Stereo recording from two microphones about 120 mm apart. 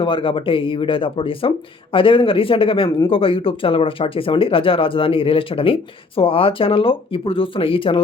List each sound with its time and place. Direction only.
0.0 s speech: 45° left (ahead or behind)